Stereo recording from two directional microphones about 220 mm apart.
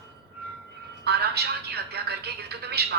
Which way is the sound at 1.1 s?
50° right (ahead or behind).